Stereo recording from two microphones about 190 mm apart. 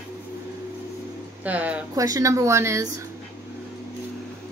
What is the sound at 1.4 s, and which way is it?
Speech, 5° right (ahead or behind).